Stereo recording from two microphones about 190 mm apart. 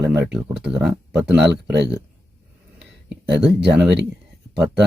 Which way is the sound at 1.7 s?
65° right (ahead or behind).